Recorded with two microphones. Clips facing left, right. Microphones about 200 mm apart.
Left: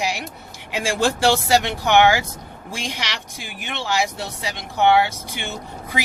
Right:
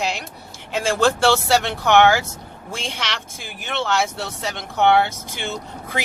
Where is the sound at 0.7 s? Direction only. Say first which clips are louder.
Right 2 dB; 15° left (ahead or behind).